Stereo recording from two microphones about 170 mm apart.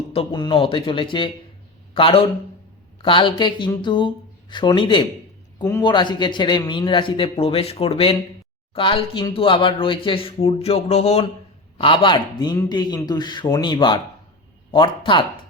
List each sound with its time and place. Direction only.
0.1 s a man's voice: 30° left (ahead or behind)